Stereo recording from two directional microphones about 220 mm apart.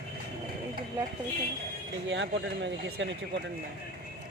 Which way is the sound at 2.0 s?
55° right (ahead or behind).